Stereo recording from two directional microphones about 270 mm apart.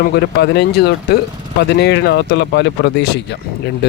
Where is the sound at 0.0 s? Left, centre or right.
Left.